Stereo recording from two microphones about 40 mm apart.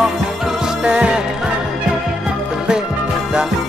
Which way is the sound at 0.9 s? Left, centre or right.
Right.